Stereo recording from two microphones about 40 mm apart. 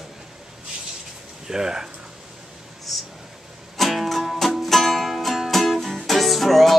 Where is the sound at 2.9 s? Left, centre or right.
Centre.